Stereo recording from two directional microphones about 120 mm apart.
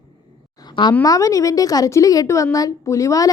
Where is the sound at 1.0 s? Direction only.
30° left (ahead or behind).